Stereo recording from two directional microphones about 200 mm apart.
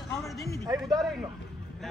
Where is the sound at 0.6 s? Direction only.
20° right (ahead or behind).